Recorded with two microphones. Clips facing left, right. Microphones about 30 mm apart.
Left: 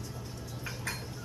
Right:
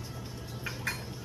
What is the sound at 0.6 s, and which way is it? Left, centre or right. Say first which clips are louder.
Dishes: right 3 dB; centre.